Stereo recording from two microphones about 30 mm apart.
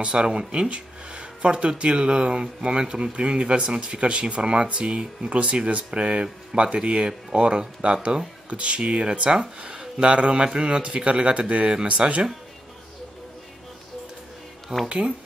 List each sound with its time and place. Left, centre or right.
0.0 s a man's voice: right
12.0 s speech: right
14.9 s speech: right